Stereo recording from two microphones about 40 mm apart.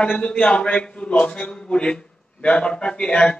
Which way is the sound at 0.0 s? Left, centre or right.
Left.